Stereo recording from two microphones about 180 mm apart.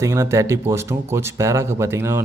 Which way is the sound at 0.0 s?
15° right (ahead or behind).